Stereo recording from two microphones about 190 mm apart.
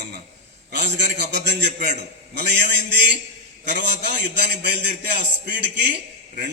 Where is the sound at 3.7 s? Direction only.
65° right (ahead or behind).